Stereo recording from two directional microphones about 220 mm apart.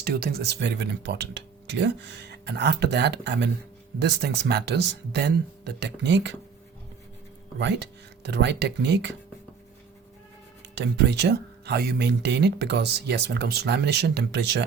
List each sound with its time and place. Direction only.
0.0 s speech: 45° right (ahead or behind)
7.6 s speech: 50° right (ahead or behind)
10.8 s speech: 50° right (ahead or behind)